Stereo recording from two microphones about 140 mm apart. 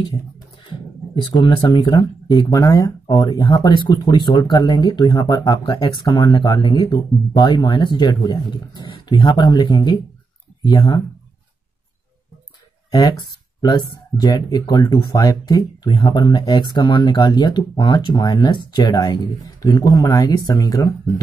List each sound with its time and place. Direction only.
0.7 s speech: 35° left (ahead or behind)
13.6 s speech: 30° left (ahead or behind)